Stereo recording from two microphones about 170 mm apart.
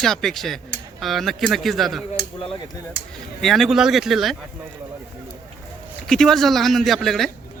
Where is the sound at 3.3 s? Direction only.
Centre (ahead or behind).